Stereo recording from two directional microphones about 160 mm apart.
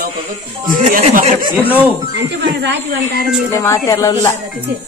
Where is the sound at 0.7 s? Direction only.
55° right (ahead or behind).